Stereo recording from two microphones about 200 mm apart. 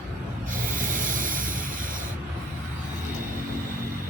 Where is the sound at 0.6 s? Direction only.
45° right (ahead or behind).